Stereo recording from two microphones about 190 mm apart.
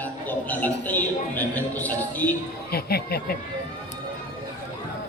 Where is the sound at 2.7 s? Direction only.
55° left (ahead or behind).